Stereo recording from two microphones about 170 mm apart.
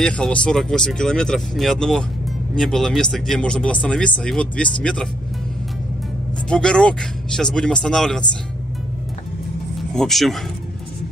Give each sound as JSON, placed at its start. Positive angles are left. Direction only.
{"t": 0.0, "sound": "speech", "side_deg": 5}
{"t": 6.5, "sound": "speech", "side_deg": 5}
{"t": 9.8, "sound": "speech", "side_deg": 0}